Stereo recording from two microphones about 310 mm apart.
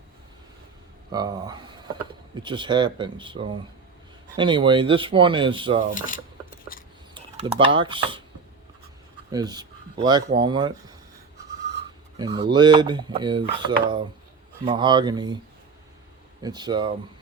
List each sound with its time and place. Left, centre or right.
1.1 s speech: centre
5.9 s cutlery: left
7.1 s speech: centre
9.3 s speech: centre
12.2 s speech: centre
16.4 s speech: centre